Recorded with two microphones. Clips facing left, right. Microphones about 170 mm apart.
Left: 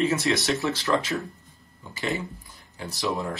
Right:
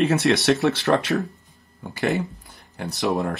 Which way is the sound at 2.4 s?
65° right (ahead or behind).